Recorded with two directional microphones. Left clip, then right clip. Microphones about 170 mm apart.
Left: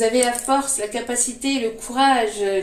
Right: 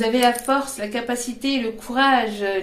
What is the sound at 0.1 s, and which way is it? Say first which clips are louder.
Speech: right 1 dB; 40° right (ahead or behind).